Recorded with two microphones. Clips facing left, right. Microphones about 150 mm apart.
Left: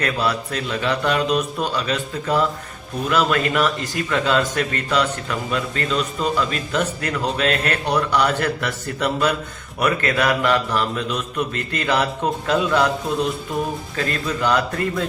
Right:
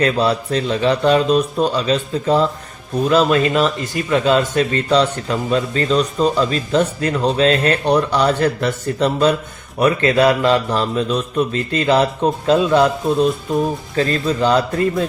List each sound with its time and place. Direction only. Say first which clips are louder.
0.0 s a man's voice: right 6 dB; 30° right (ahead or behind)